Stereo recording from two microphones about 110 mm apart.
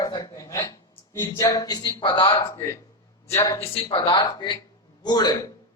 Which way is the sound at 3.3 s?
25° left (ahead or behind).